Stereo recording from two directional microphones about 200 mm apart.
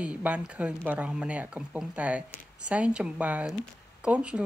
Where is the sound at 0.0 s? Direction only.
5° right (ahead or behind).